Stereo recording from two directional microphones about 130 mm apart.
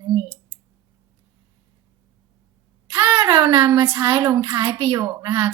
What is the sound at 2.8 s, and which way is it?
Speech, 30° right (ahead or behind).